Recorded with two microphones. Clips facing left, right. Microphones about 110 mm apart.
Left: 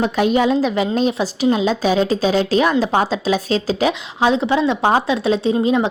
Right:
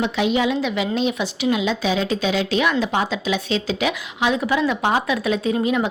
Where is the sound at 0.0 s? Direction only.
45° left (ahead or behind).